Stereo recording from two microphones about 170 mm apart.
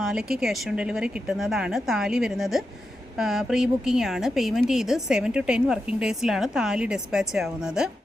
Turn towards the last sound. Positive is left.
turn(degrees=-5)  # may be behind; listen again after turning